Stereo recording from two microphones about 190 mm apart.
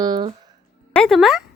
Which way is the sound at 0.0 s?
20° right (ahead or behind).